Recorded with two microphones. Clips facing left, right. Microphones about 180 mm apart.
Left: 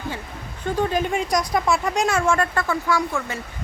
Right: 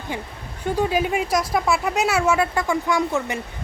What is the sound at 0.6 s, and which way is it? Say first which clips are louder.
Speech: right 1 dB; 10° right (ahead or behind).